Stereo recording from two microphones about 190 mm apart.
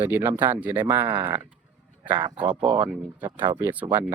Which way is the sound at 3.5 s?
10° right (ahead or behind).